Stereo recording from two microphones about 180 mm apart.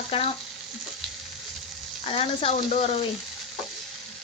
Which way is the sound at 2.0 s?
30° left (ahead or behind).